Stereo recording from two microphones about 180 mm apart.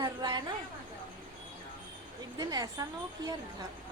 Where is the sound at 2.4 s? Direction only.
20° right (ahead or behind).